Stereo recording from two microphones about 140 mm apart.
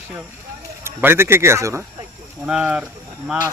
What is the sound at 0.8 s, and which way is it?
Speech, 15° right (ahead or behind).